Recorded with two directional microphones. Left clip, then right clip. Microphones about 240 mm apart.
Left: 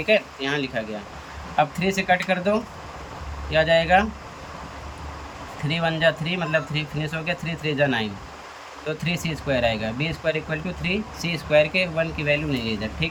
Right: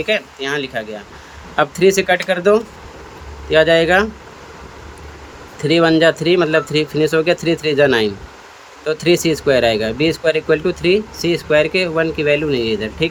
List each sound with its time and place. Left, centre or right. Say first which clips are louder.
0.0 s speech: right 2 dB; centre
5.6 s speech: right 10 dB; right